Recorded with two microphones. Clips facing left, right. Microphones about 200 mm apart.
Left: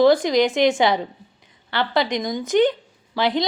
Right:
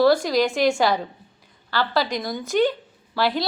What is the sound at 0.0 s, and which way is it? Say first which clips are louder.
A woman's voice: left 2 dB; 20° left (ahead or behind).